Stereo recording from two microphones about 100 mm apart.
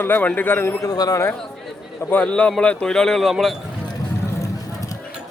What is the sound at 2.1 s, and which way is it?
A man's voice, 15° left (ahead or behind).